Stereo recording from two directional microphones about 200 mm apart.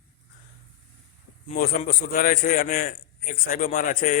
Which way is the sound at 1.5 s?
45° left (ahead or behind).